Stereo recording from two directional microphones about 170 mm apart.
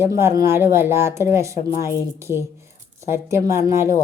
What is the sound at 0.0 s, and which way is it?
Speech, 15° right (ahead or behind).